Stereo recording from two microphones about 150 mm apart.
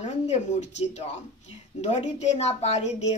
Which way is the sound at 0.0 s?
50° left (ahead or behind).